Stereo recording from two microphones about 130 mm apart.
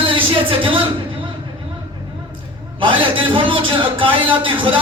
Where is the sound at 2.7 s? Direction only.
40° right (ahead or behind).